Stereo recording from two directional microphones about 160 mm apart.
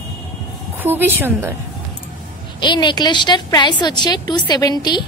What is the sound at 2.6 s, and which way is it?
A woman's voice, 30° left (ahead or behind).